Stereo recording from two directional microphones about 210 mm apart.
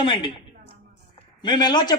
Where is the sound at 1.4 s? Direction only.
20° left (ahead or behind).